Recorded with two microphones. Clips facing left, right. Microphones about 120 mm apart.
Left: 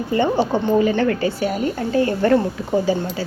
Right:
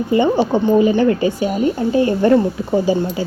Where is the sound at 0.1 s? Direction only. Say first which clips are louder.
Right 3 dB; 15° right (ahead or behind).